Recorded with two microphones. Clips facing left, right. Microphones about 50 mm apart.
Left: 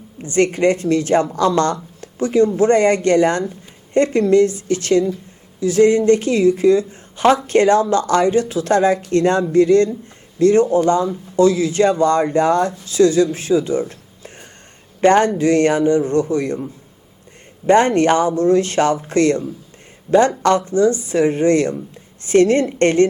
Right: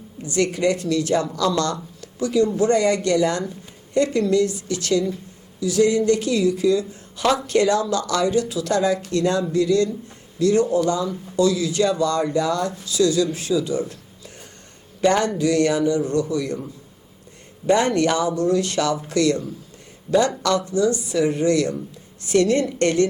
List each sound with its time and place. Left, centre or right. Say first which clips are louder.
0.2 s speech: left 5 dB; left
15.0 s speech: left 6 dB; left
17.7 s speech: left 5 dB; left